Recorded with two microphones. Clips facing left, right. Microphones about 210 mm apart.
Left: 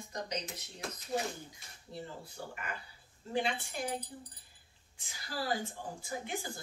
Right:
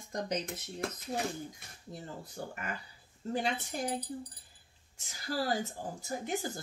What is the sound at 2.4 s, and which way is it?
Speech, 40° right (ahead or behind).